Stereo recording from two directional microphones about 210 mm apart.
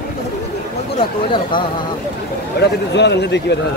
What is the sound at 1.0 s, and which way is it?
Speech, 25° left (ahead or behind).